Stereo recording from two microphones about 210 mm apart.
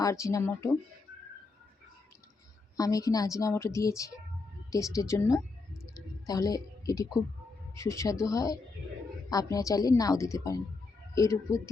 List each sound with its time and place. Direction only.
0.0 s a woman's voice: 15° left (ahead or behind)
2.7 s a woman's voice: 15° left (ahead or behind)